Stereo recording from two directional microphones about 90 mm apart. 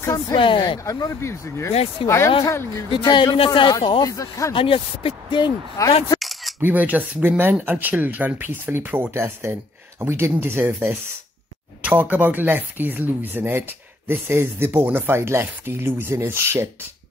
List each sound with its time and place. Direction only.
0.4 s a man's voice: 65° left (ahead or behind)
0.8 s speech: 40° left (ahead or behind)
2.9 s a man's voice: 60° left (ahead or behind)
3.3 s a man's voice: 75° left (ahead or behind)
4.0 s speech: 35° left (ahead or behind)
4.6 s speech: 90° left
5.8 s speech: 40° left (ahead or behind)
6.1 s a sound: centre (ahead or behind)
6.6 s speech: 20° right (ahead or behind)